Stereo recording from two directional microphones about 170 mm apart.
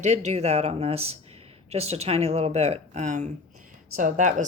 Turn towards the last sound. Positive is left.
turn(degrees=-45)  # may be behind; listen again after turning